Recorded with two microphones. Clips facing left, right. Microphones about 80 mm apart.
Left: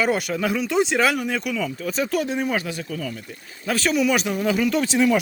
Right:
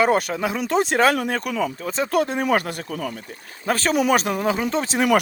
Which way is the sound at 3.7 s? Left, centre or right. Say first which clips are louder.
Right 2 dB; right.